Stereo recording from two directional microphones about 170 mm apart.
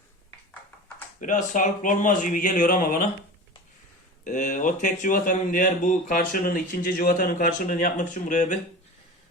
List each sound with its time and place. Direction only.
1.2 s speech: 45° left (ahead or behind)
4.2 s speech: 45° left (ahead or behind)